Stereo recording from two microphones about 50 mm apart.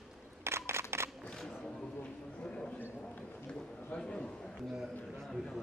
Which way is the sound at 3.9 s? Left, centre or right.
Centre.